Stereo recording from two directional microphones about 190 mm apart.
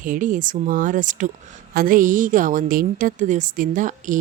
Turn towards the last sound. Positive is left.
turn(degrees=-45)  # may be behind; listen again after turning